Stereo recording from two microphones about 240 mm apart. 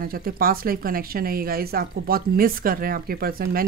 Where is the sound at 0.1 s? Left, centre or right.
Right.